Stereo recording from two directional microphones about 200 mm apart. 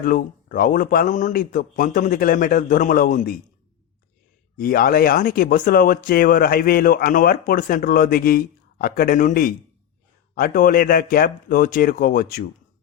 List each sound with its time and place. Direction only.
0.0 s speech: 45° left (ahead or behind)
4.5 s speech: 45° left (ahead or behind)